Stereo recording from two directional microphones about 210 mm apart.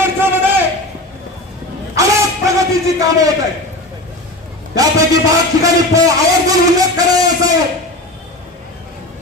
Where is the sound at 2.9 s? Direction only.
15° right (ahead or behind).